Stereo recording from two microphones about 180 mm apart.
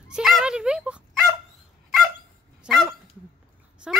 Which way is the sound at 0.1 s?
Centre (ahead or behind).